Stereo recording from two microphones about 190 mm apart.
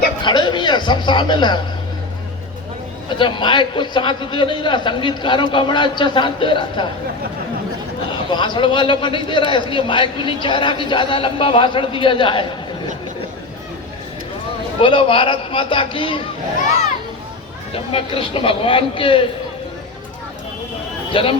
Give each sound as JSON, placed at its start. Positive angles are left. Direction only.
{"t": 0.2, "sound": "a man's voice", "side_deg": 25}
{"t": 3.1, "sound": "a man's voice", "side_deg": 25}
{"t": 8.1, "sound": "a man's voice", "side_deg": 25}
{"t": 14.8, "sound": "a man's voice", "side_deg": 30}
{"t": 17.9, "sound": "a man's voice", "side_deg": 30}
{"t": 21.1, "sound": "a man's voice", "side_deg": 30}